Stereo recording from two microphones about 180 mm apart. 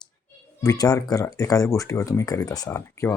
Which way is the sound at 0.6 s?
20° left (ahead or behind).